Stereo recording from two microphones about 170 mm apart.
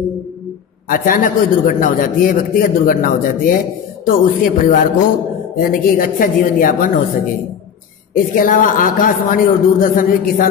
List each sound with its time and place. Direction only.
0.8 s a man's voice: 55° left (ahead or behind)
8.1 s a man's voice: 55° left (ahead or behind)